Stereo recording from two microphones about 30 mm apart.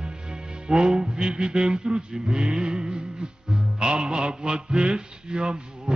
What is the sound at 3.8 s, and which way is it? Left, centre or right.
Music, right.